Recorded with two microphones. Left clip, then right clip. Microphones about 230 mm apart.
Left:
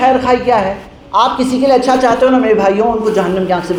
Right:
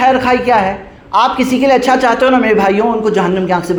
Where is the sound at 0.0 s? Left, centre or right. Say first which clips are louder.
Even; right.